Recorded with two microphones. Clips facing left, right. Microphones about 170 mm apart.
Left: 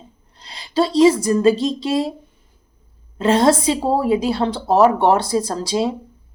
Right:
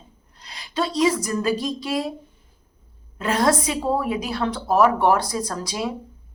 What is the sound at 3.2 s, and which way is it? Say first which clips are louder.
Speech: left 6 dB; 25° left (ahead or behind).